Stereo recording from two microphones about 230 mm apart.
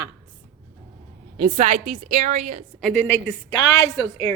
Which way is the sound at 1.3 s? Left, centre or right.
Right.